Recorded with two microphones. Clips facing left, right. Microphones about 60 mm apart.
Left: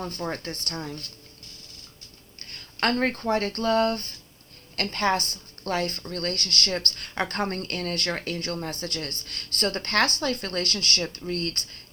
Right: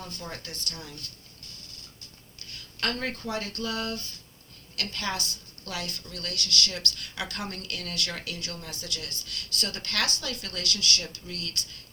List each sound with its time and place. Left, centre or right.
0.0 s speech: left
2.4 s a woman's voice: left